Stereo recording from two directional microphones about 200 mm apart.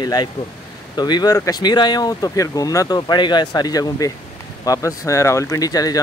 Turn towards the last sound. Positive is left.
turn(degrees=20)  # may be behind; listen again after turning